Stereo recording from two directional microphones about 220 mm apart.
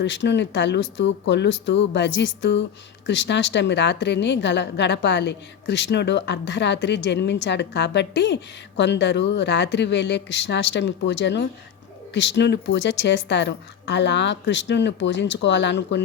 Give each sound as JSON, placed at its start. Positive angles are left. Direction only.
{"t": 0.0, "sound": "a woman's voice", "side_deg": 55}